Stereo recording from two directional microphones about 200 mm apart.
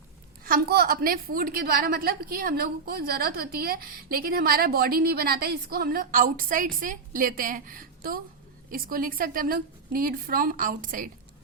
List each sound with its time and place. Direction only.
0.4 s a woman's voice: 50° right (ahead or behind)